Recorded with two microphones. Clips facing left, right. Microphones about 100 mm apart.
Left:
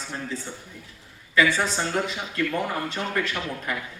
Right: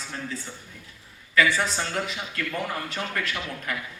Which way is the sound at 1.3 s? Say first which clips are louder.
Left 1 dB; 25° left (ahead or behind).